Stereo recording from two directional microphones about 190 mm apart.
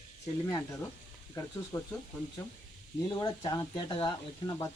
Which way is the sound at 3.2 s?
25° left (ahead or behind).